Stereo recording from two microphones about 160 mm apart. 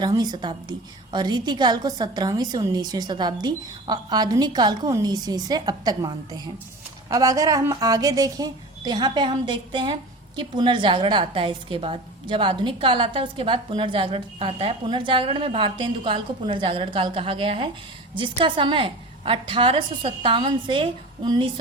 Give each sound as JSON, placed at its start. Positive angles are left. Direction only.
{"t": 0.0, "sound": "a woman's voice", "side_deg": -25}